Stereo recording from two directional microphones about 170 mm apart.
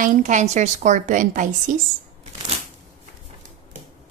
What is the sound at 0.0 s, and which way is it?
A woman's voice, 45° right (ahead or behind).